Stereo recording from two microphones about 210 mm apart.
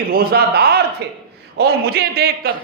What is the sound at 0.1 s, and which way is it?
A man's voice, 45° right (ahead or behind).